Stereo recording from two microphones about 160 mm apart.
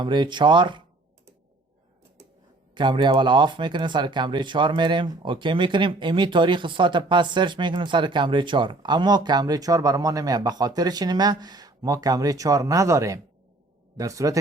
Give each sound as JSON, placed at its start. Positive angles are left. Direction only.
{"t": 0.0, "sound": "speech", "side_deg": -30}
{"t": 2.7, "sound": "a man's voice", "side_deg": -30}